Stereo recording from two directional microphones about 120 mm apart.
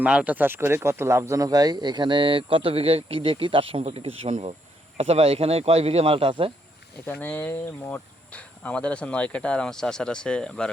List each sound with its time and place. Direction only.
0.0 s speech: 10° right (ahead or behind); by 6.5 s 50° right (ahead or behind)
7.0 s speech: 10° left (ahead or behind)